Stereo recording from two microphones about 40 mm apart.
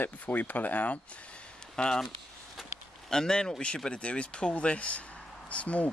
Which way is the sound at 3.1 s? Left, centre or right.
Centre.